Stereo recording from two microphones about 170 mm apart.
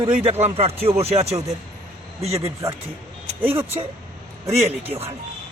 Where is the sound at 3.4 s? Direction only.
15° right (ahead or behind).